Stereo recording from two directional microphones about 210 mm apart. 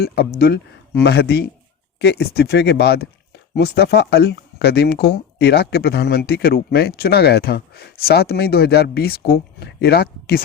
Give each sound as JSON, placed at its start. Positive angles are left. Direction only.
{"t": 0.0, "sound": "speech", "side_deg": 50}